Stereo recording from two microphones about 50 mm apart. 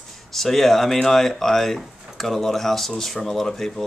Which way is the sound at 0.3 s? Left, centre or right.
Centre.